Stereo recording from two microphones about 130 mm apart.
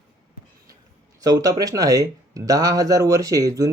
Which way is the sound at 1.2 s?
30° right (ahead or behind).